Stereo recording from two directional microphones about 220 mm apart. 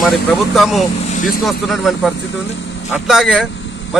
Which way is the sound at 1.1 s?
35° left (ahead or behind).